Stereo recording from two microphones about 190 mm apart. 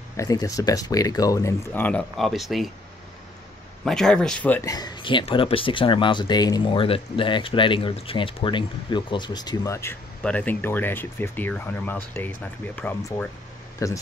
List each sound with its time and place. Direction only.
0.2 s speech: 20° left (ahead or behind); by 2.7 s centre (ahead or behind)
3.8 s speech: 5° left (ahead or behind)